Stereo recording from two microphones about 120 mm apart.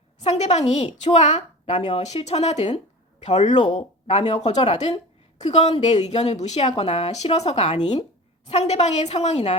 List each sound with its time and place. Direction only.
0.2 s a woman's voice: 70° left (ahead or behind)
3.2 s a woman's voice: 75° left (ahead or behind)